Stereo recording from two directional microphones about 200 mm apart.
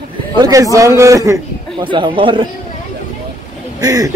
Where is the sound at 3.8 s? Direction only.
15° right (ahead or behind).